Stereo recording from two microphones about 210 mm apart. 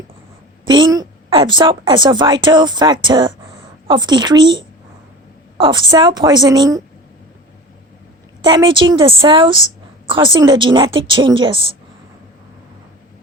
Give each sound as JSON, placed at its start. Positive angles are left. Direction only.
{"t": 0.6, "sound": "a woman's voice", "side_deg": -20}
{"t": 8.4, "sound": "a woman's voice", "side_deg": -20}